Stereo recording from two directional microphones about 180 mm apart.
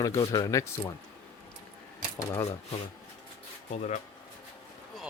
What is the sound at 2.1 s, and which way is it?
Speech, 20° left (ahead or behind).